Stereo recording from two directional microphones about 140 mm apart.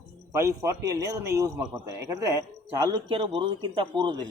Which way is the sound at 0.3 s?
20° right (ahead or behind).